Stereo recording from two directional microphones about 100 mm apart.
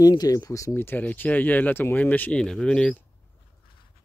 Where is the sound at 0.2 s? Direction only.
35° left (ahead or behind); by 3.0 s 10° left (ahead or behind).